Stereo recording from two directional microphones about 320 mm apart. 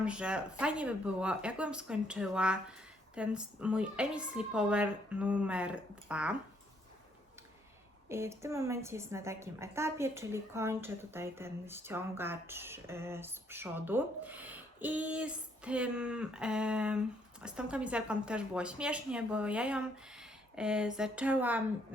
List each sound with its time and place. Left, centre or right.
0.0 s a woman's voice: centre
8.1 s a woman's voice: centre